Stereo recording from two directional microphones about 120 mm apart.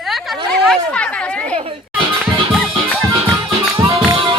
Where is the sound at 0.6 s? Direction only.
5° left (ahead or behind).